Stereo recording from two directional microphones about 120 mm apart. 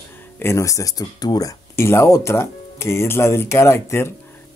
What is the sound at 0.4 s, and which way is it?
Speech, 25° left (ahead or behind).